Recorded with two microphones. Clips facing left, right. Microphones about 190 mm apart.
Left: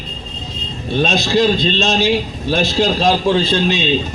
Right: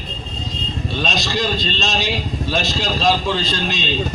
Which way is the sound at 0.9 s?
55° left (ahead or behind).